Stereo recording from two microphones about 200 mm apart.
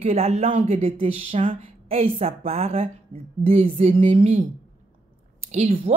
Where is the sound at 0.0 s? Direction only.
30° right (ahead or behind).